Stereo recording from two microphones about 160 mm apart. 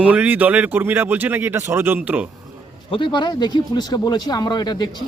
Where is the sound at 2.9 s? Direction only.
30° left (ahead or behind).